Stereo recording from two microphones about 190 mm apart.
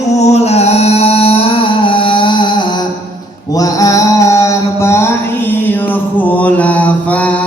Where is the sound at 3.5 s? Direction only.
20° left (ahead or behind).